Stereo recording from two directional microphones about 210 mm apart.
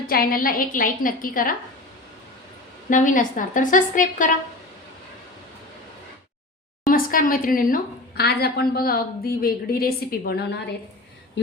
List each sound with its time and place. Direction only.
0.1 s a woman's voice: 45° left (ahead or behind)
2.9 s a woman's voice: 40° left (ahead or behind)
6.8 s a woman's voice: 40° left (ahead or behind)